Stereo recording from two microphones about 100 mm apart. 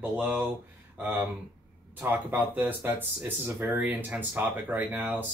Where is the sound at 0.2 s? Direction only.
15° right (ahead or behind).